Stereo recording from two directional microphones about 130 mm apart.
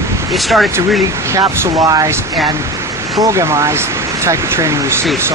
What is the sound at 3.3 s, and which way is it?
Speech, 25° right (ahead or behind).